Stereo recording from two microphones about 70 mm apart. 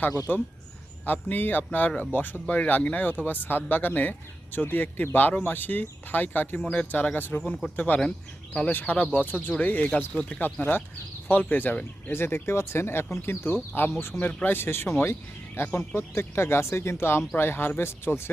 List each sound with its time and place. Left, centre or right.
0.3 s speech: left
10.4 s speech: left
12.1 s speech: left
14.2 s speech: centre
14.5 s speech: left